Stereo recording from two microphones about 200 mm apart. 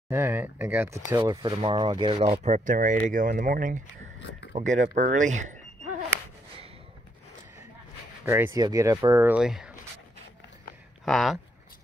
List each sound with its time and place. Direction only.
0.1 s speech: 10° right (ahead or behind); by 5.6 s 40° right (ahead or behind)
8.5 s speech: 20° right (ahead or behind)
11.1 s speech: centre (ahead or behind)